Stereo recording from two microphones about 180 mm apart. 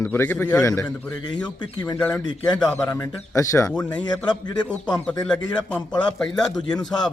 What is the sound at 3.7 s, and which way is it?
Speech, 5° left (ahead or behind).